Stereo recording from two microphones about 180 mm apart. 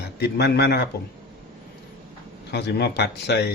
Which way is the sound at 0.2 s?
65° left (ahead or behind).